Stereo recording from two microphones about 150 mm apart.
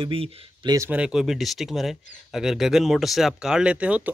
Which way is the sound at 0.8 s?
5° right (ahead or behind).